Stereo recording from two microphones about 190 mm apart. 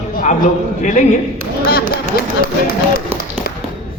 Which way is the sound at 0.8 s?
40° left (ahead or behind).